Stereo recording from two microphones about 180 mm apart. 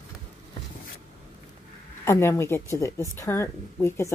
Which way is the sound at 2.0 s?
15° left (ahead or behind).